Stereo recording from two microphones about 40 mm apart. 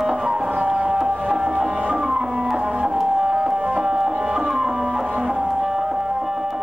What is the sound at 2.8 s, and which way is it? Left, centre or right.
Music, centre.